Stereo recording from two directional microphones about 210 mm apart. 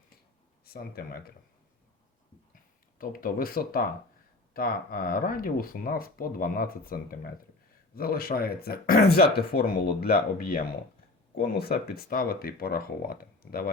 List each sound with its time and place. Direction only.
0.6 s speech: 45° left (ahead or behind)
3.0 s speech: 40° left (ahead or behind)